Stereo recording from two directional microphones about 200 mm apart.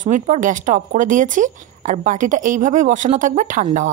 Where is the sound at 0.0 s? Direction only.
40° right (ahead or behind).